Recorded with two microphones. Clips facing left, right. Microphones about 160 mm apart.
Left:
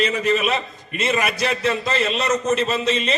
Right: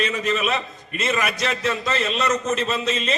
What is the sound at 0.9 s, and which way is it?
A man's voice, 5° left (ahead or behind).